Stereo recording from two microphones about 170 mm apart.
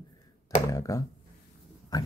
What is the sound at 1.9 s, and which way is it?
Pig, 25° left (ahead or behind).